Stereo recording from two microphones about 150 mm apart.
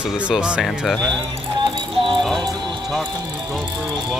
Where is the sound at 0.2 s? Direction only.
5° right (ahead or behind).